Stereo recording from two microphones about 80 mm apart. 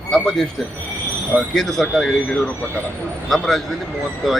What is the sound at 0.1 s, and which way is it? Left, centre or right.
Speech, centre.